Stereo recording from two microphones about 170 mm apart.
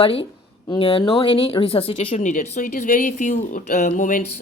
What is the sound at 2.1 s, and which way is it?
Speech, 45° left (ahead or behind).